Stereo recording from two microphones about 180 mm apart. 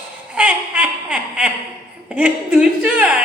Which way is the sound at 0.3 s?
5° right (ahead or behind).